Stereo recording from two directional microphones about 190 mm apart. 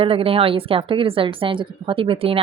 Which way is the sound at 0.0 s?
30° right (ahead or behind).